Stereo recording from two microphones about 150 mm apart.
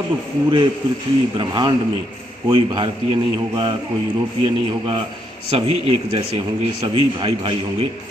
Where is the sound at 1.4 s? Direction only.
30° right (ahead or behind).